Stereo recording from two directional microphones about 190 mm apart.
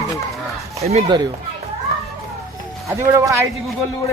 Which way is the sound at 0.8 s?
35° right (ahead or behind).